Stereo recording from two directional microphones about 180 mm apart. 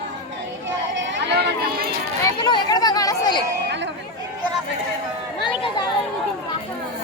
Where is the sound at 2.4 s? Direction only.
20° left (ahead or behind).